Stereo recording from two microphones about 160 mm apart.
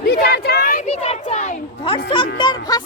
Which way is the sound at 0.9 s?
40° left (ahead or behind).